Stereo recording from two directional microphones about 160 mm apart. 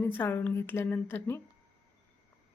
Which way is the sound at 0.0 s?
15° left (ahead or behind).